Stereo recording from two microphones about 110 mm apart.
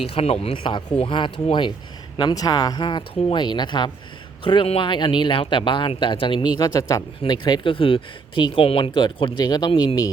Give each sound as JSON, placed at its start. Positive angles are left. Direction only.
{"t": 0.1, "sound": "speech", "side_deg": 65}
{"t": 4.4, "sound": "speech", "side_deg": 55}
{"t": 6.6, "sound": "speech", "side_deg": 30}
{"t": 7.3, "sound": "speech", "side_deg": 40}